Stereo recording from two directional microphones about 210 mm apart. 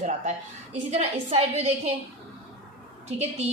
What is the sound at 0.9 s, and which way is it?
Speech, 30° right (ahead or behind).